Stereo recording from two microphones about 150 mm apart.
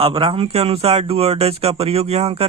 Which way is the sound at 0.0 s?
35° right (ahead or behind).